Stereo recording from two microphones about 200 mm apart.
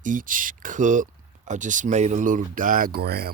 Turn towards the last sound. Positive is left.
turn(degrees=-50)  # may be behind; listen again after turning